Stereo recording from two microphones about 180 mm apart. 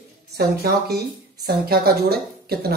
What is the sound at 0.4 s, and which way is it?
A woman's voice, 60° right (ahead or behind).